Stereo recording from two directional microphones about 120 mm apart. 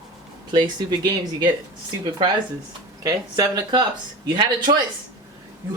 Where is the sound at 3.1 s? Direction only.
35° right (ahead or behind).